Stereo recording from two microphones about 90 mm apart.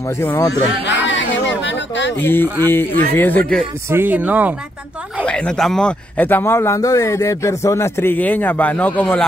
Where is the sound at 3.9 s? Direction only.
20° right (ahead or behind).